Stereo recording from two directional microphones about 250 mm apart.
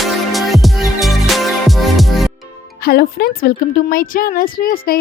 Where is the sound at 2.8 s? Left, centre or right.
Left.